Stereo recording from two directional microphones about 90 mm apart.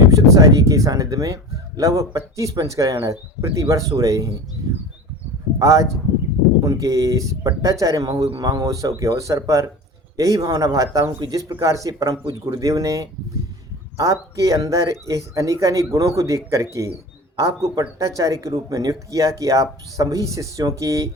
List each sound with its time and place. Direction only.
0.1 s speech: 40° right (ahead or behind)
5.5 s speech: 35° right (ahead or behind)